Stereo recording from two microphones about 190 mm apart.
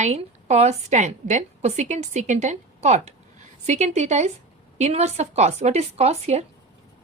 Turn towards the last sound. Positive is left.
turn(degrees=-35)  # may be behind; listen again after turning